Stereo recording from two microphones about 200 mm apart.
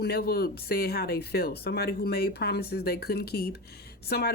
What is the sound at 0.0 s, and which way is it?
Speech, 50° left (ahead or behind).